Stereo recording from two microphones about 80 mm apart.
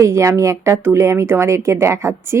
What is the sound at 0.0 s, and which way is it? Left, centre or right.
A woman's voice, right.